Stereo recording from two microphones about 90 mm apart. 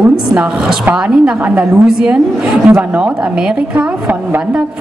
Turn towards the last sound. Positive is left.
turn(degrees=-10)  # may be behind; listen again after turning